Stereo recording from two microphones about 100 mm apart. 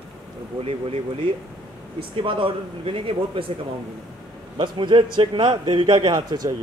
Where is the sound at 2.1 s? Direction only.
60° right (ahead or behind).